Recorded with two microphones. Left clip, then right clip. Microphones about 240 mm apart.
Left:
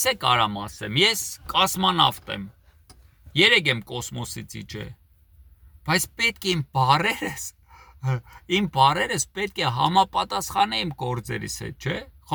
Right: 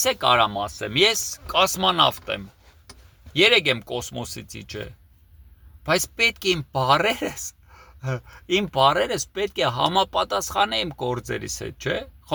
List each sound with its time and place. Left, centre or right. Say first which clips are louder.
0.0 s speech: right 2 dB; centre
3.5 s speech: right 1 dB; centre
6.0 s speech: right 3 dB; centre